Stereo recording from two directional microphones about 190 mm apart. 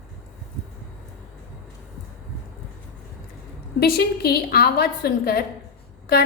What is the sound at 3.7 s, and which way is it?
A woman's voice, 55° left (ahead or behind).